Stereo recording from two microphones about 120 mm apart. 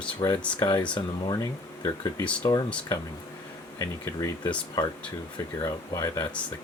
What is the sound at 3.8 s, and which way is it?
Speech, 20° left (ahead or behind).